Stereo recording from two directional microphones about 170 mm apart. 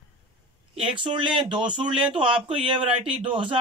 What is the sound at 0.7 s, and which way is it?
A man's voice, 30° right (ahead or behind).